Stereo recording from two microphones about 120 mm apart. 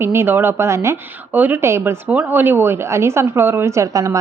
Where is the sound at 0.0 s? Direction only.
20° right (ahead or behind).